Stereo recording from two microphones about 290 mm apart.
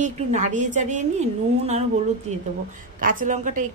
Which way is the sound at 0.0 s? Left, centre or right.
Right.